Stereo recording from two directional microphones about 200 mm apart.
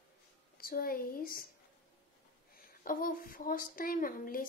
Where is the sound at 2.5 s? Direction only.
45° left (ahead or behind).